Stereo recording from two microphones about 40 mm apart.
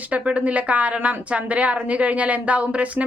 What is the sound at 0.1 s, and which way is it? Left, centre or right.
A woman's voice, right.